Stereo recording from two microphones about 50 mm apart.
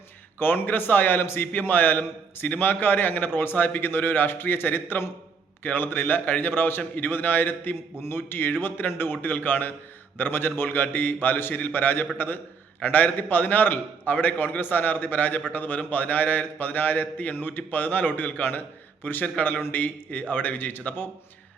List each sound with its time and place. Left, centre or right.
0.3 s a man's voice: left